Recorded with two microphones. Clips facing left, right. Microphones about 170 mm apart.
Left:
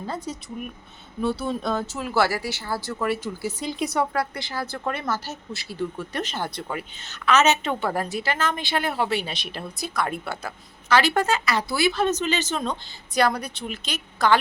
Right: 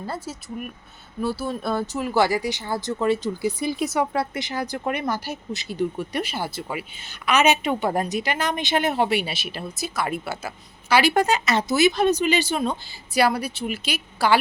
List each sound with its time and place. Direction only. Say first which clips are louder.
0.0 s speech: even; 5° right (ahead or behind); by 3.5 s 20° right (ahead or behind)
3.6 s speech: left 1 dB; 5° right (ahead or behind)
4.1 s speech: right 2 dB; 20° right (ahead or behind)